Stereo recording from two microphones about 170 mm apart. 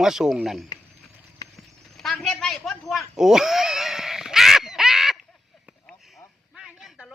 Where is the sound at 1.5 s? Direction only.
Centre (ahead or behind).